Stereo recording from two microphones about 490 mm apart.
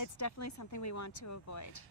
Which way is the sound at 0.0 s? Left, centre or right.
Left.